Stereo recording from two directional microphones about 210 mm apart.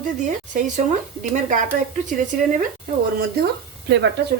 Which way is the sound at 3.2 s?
55° right (ahead or behind).